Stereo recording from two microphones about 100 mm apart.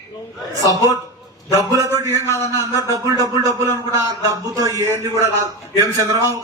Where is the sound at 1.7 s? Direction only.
35° right (ahead or behind).